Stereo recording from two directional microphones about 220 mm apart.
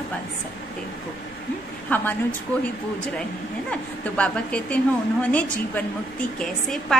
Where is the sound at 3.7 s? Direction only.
5° left (ahead or behind).